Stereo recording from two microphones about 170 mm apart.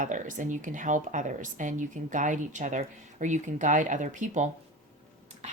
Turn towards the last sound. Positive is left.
turn(degrees=-45)  # may be behind; listen again after turning